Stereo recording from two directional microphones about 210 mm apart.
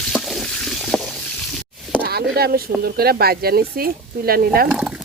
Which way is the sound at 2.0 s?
50° right (ahead or behind).